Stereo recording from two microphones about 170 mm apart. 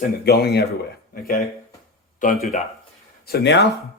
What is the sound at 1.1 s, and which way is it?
Speech, 60° left (ahead or behind).